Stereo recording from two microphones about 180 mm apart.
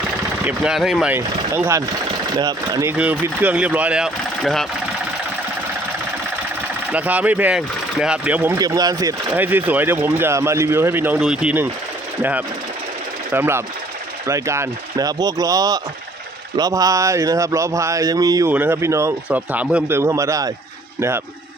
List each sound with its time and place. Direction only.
0.4 s speech: 5° right (ahead or behind)
1.1 s speech: 15° right (ahead or behind)
3.0 s speech: 10° right (ahead or behind)
6.9 s speech: 10° right (ahead or behind)